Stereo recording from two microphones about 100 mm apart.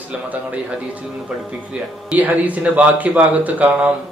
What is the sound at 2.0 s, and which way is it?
A man's voice, 15° right (ahead or behind).